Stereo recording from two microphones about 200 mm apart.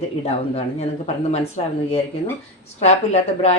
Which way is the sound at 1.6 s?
30° left (ahead or behind).